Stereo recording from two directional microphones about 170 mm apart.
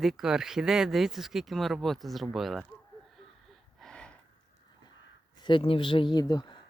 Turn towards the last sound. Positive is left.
turn(degrees=25)  # may be behind; listen again after turning